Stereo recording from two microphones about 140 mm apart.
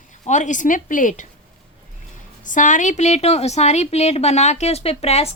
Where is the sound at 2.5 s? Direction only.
65° left (ahead or behind).